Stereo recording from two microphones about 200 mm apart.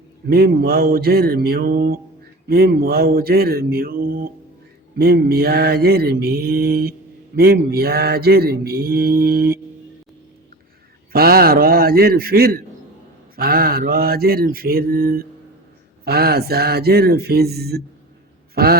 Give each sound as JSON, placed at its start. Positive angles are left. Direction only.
{"t": 0.3, "sound": "mantra", "side_deg": -50}
{"t": 11.1, "sound": "mantra", "side_deg": -50}
{"t": 18.5, "sound": "a sound", "side_deg": -50}